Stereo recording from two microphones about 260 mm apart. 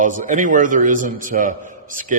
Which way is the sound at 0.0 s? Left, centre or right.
Right.